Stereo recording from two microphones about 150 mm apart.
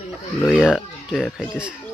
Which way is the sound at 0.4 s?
5° right (ahead or behind).